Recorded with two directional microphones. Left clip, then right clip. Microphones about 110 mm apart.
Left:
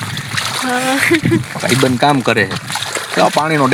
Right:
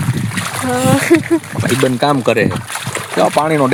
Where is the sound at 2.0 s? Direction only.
20° left (ahead or behind).